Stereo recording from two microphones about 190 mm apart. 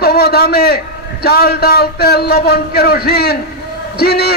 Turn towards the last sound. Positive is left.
turn(degrees=55)  # may be behind; listen again after turning